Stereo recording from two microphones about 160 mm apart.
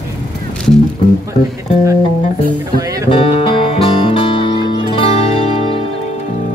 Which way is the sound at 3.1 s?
30° left (ahead or behind).